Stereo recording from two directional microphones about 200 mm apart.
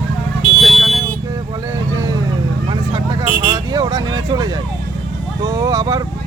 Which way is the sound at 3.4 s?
20° right (ahead or behind).